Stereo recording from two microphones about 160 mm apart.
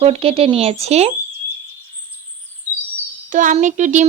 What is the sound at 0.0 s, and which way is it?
Speech, 35° right (ahead or behind).